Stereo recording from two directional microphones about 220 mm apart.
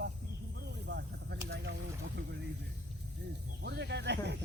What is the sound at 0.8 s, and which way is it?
Snake, 50° right (ahead or behind).